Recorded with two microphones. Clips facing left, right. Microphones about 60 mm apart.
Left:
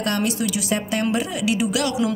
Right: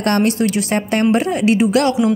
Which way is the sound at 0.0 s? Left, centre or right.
Right.